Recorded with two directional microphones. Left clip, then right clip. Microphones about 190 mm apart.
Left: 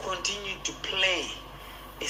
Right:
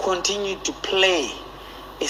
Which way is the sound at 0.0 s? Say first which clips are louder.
Right 9 dB; 50° right (ahead or behind).